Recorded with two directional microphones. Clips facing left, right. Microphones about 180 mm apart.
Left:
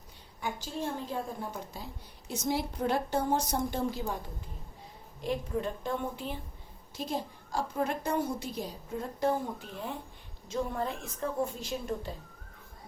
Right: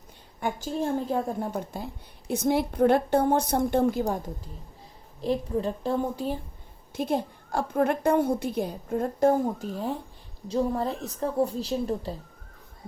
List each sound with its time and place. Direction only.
0.3 s a woman's voice: 50° right (ahead or behind)
5.2 s a woman's voice: 35° right (ahead or behind)
6.9 s a woman's voice: 55° right (ahead or behind); by 12.1 s 35° right (ahead or behind)